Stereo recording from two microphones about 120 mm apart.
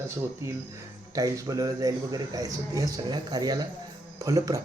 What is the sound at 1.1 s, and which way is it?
Speech, 30° right (ahead or behind).